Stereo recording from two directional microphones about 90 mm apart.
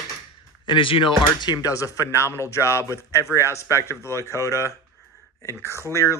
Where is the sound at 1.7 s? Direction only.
35° left (ahead or behind).